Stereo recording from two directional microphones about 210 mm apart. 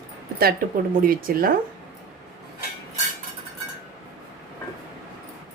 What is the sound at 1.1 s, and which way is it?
Speech, 40° right (ahead or behind).